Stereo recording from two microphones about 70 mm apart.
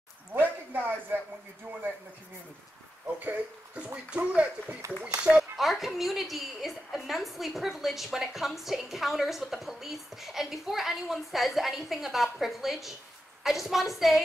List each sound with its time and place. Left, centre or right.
0.3 s a sound: right
3.1 s speech: right
5.2 s a woman's voice: centre